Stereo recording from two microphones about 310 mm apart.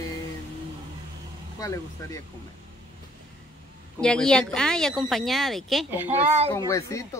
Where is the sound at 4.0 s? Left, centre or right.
Centre.